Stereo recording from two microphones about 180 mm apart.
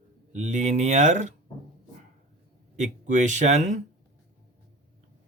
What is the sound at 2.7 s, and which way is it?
A man's voice, 40° right (ahead or behind).